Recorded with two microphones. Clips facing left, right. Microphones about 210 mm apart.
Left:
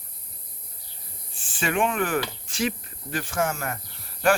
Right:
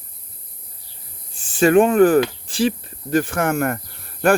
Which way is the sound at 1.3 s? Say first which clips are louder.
Right 14 dB; 40° right (ahead or behind).